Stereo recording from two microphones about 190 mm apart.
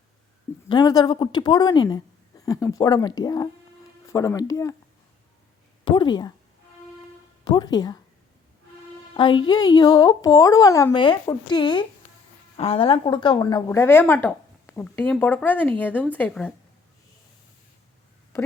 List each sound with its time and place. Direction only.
0.7 s a woman's voice: 20° left (ahead or behind)
5.8 s speech: 25° left (ahead or behind)
7.4 s speech: 20° left (ahead or behind)
9.1 s a woman's voice: 25° left (ahead or behind); by 16.5 s 5° left (ahead or behind)